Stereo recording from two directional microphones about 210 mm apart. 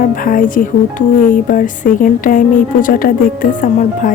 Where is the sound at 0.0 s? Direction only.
40° left (ahead or behind).